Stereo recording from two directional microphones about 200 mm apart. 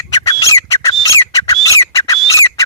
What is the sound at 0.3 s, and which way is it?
Bird, 20° left (ahead or behind).